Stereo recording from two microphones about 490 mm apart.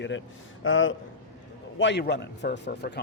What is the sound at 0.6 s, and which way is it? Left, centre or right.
A man's voice, left.